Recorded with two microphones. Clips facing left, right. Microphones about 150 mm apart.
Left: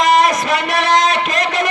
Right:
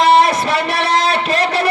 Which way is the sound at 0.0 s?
30° right (ahead or behind).